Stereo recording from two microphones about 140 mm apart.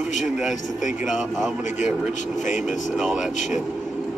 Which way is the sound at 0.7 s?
65° left (ahead or behind).